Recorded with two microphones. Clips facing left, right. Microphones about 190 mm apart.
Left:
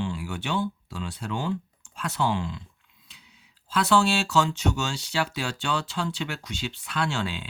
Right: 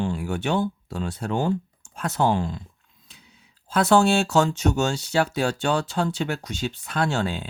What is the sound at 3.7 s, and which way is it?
Speech, 45° right (ahead or behind).